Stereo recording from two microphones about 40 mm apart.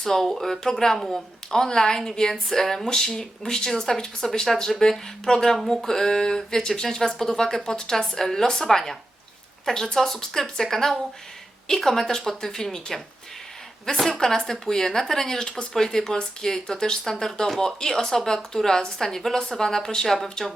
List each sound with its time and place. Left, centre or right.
0.0 s speech: centre
0.9 s a woman's voice: centre
1.5 s speech: centre
14.2 s speech: centre